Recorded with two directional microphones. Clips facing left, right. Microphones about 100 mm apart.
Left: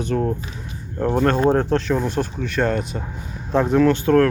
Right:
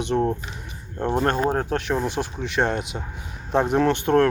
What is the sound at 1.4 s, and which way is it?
Speech, 10° right (ahead or behind).